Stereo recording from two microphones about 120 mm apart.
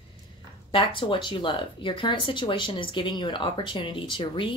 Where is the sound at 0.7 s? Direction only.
45° left (ahead or behind).